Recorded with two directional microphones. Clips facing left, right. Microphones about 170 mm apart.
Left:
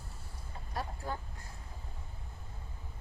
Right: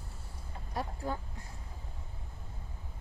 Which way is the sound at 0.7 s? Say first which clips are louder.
Right 2 dB; 10° right (ahead or behind).